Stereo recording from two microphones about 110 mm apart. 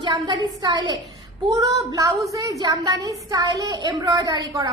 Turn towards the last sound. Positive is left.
turn(degrees=-35)  # may be behind; listen again after turning